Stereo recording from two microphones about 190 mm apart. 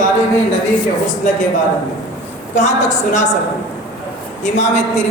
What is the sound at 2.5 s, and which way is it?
Speech, 40° left (ahead or behind).